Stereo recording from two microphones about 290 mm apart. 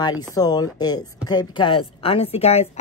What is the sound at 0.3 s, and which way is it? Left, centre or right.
A woman's voice, centre.